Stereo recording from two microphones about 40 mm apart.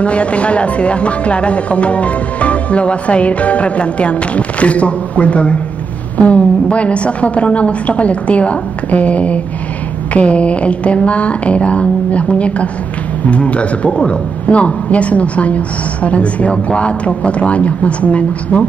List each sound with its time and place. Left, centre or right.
0.0 s speech: left